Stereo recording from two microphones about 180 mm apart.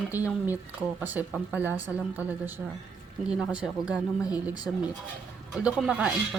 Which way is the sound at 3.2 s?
5° right (ahead or behind).